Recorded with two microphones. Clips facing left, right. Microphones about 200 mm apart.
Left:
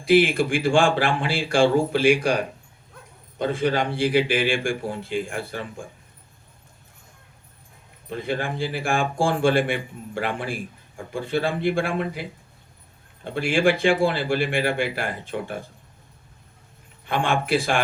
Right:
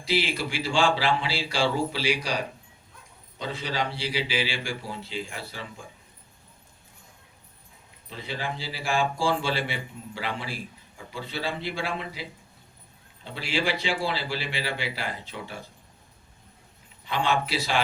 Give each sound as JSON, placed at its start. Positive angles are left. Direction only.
{"t": 0.0, "sound": "speech", "side_deg": 55}
{"t": 8.1, "sound": "speech", "side_deg": 55}
{"t": 17.1, "sound": "speech", "side_deg": 50}